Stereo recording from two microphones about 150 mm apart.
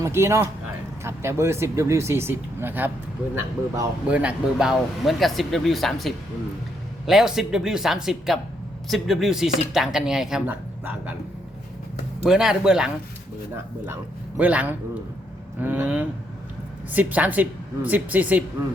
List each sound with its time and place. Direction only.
0.0 s speech: 15° right (ahead or behind)
4.0 s speech: 10° right (ahead or behind)
12.2 s speech: 5° right (ahead or behind)
14.3 s speech: 10° right (ahead or behind)